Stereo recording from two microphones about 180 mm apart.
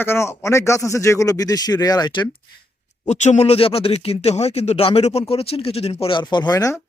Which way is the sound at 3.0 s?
40° left (ahead or behind).